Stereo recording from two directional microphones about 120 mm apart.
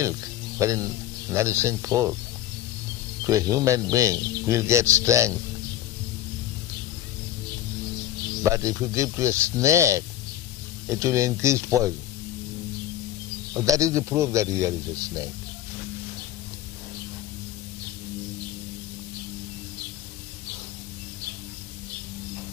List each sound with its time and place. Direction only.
0.0 s a man's voice: 25° right (ahead or behind)
3.3 s a man's voice: 25° right (ahead or behind)
8.4 s a man's voice: 25° right (ahead or behind)
13.5 s a man's voice: 30° right (ahead or behind)